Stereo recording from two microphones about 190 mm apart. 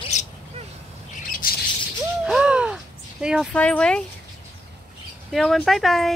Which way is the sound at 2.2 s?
5° right (ahead or behind).